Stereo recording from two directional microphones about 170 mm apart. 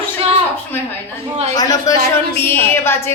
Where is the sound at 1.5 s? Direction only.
20° left (ahead or behind).